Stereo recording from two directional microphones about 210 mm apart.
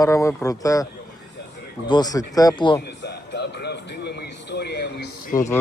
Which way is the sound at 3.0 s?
55° left (ahead or behind).